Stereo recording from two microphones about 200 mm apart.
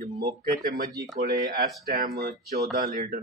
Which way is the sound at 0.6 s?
45° right (ahead or behind).